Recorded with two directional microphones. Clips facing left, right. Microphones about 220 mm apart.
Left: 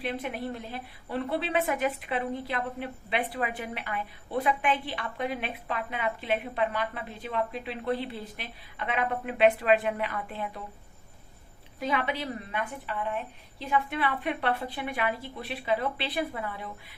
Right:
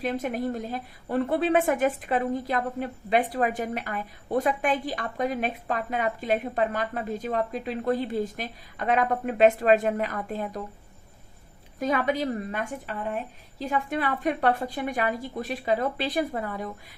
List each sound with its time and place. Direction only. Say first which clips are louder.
0.0 s a woman's voice: right 5 dB; 45° right (ahead or behind)
11.8 s a woman's voice: right 5 dB; 45° right (ahead or behind)